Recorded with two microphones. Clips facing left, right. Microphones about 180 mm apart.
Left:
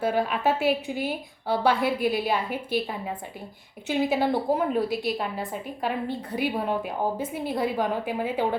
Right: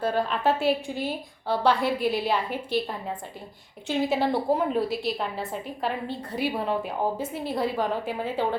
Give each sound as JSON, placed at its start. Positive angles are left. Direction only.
{"t": 0.0, "sound": "a woman's voice", "side_deg": 10}
{"t": 6.1, "sound": "a woman's voice", "side_deg": 55}
{"t": 6.7, "sound": "a woman's voice", "side_deg": 0}